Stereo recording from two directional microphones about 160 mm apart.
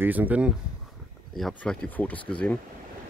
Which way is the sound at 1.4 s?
5° left (ahead or behind).